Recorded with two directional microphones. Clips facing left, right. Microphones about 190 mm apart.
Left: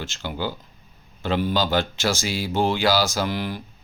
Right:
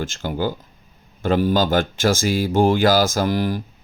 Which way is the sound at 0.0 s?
45° right (ahead or behind).